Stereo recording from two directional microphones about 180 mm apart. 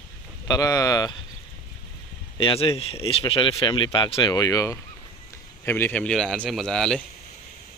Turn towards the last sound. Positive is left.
turn(degrees=5)  # may be behind; listen again after turning